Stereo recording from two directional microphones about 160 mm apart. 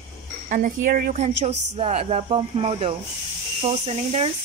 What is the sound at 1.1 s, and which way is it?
Speech, 45° right (ahead or behind).